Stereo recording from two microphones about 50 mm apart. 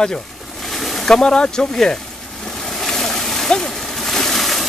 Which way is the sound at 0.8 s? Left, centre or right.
Centre.